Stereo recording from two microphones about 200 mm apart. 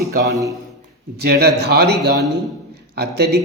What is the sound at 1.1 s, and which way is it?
A man's voice, 55° right (ahead or behind).